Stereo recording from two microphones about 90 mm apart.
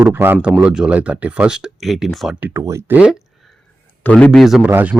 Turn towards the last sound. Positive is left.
turn(degrees=-20)  # may be behind; listen again after turning